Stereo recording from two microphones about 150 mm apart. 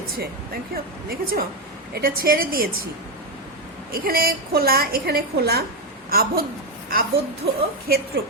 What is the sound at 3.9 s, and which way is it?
A woman's voice, 80° right.